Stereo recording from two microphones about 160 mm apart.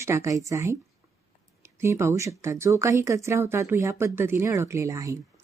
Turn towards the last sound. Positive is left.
turn(degrees=-20)  # may be behind; listen again after turning